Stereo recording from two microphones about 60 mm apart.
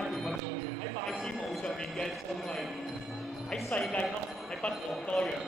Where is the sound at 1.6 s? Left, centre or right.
Centre.